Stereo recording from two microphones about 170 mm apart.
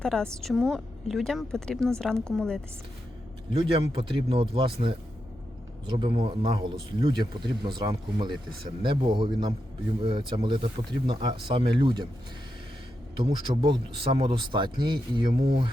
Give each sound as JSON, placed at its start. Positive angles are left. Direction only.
{"t": 0.0, "sound": "a woman's voice", "side_deg": 5}
{"t": 3.6, "sound": "speech", "side_deg": -30}
{"t": 13.2, "sound": "speech", "side_deg": -30}